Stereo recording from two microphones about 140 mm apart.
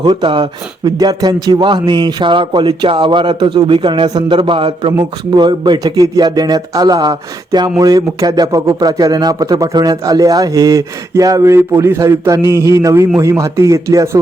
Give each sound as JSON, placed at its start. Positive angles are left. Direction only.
{"t": 0.0, "sound": "a man's voice", "side_deg": -35}